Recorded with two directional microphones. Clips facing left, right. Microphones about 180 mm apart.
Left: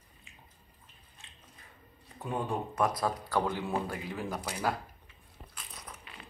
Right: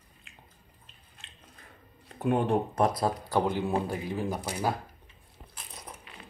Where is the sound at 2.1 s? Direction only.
70° right (ahead or behind).